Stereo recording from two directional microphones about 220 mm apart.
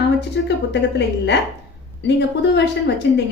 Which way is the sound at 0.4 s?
50° left (ahead or behind).